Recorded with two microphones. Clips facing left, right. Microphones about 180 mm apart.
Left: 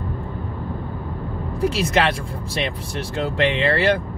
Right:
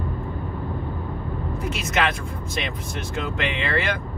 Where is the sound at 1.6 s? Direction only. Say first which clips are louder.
Left 6 dB; 30° left (ahead or behind).